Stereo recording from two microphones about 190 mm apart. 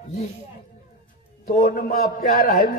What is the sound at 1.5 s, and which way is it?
A man's voice, 45° left (ahead or behind).